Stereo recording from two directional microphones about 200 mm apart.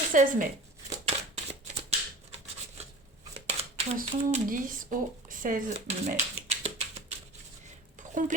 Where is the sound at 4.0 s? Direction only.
40° right (ahead or behind).